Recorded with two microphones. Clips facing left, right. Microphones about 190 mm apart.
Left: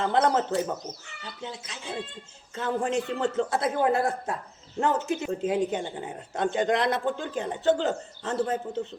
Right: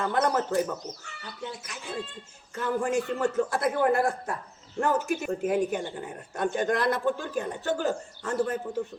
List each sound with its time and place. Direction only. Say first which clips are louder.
0.0 s a man's voice: left 2 dB; 20° left (ahead or behind)